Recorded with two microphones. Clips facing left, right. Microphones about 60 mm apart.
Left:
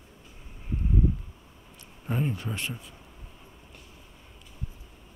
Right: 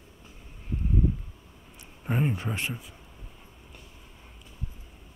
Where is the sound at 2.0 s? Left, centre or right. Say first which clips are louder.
Right 2 dB; right.